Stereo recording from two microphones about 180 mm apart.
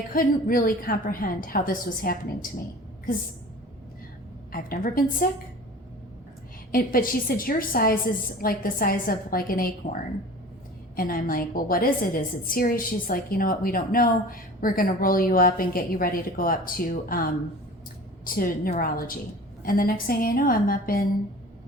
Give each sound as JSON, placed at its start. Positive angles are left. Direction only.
{"t": 0.1, "sound": "a woman's voice", "side_deg": 50}
{"t": 4.5, "sound": "a woman's voice", "side_deg": 50}
{"t": 6.7, "sound": "a woman's voice", "side_deg": 50}